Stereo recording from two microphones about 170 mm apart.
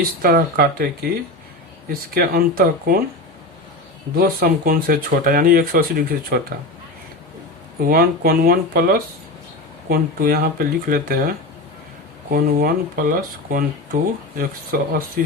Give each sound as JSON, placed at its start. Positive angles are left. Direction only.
{"t": 0.0, "sound": "speech", "side_deg": -60}
{"t": 1.9, "sound": "speech", "side_deg": -60}
{"t": 4.2, "sound": "speech", "side_deg": -60}
{"t": 7.8, "sound": "speech", "side_deg": -60}
{"t": 12.3, "sound": "speech", "side_deg": -55}